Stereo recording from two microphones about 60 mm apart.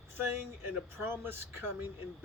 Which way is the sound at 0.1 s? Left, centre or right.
Right.